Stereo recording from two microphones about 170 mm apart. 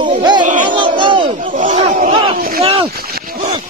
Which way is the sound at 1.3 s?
50° right (ahead or behind).